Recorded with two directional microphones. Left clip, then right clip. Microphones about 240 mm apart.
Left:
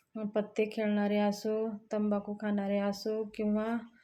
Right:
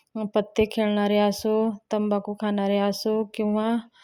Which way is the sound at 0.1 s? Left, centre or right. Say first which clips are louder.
Right 9 dB; right.